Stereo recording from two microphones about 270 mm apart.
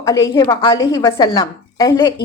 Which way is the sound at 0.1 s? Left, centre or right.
Centre.